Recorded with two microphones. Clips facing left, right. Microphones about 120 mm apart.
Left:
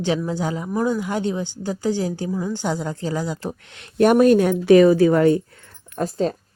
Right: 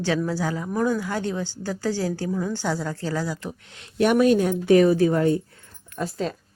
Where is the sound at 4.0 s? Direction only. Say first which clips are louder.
Left 4 dB; 45° left (ahead or behind).